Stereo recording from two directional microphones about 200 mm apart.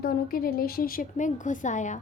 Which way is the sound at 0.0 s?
45° left (ahead or behind).